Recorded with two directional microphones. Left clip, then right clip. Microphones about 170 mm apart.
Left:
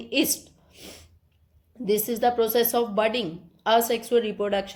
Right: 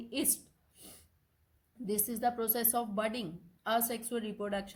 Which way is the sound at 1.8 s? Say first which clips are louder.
Left 11 dB; 40° right (ahead or behind).